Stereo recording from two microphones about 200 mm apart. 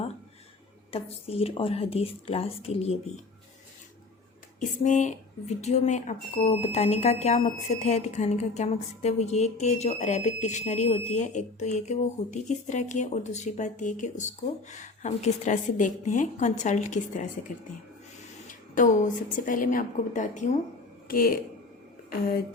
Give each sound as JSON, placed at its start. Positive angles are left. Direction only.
{"t": 0.9, "sound": "a woman's voice", "side_deg": 30}
{"t": 4.8, "sound": "speech", "side_deg": 35}
{"t": 18.7, "sound": "speech", "side_deg": 40}